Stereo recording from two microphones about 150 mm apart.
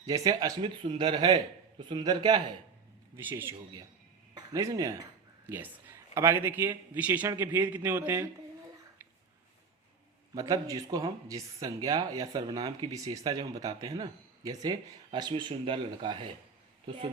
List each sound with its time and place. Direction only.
0.0 s speech: 25° right (ahead or behind)
3.2 s a man's voice: 15° right (ahead or behind)
10.3 s speech: 25° right (ahead or behind)